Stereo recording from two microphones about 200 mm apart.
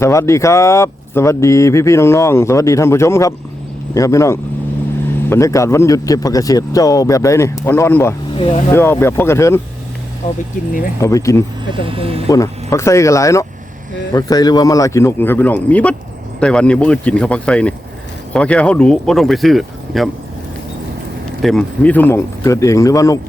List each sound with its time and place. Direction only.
0.0 s speech: 15° left (ahead or behind)
8.4 s speech: 25° left (ahead or behind)
8.7 s speech: 10° left (ahead or behind)
10.2 s speech: 40° left (ahead or behind)
11.0 s speech: 15° left (ahead or behind)
11.7 s speech: 25° right (ahead or behind)
12.3 s speech: 15° left (ahead or behind)
21.4 s speech: 5° left (ahead or behind)